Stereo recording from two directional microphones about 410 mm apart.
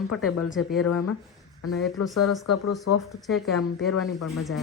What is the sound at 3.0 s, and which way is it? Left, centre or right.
Speech, centre.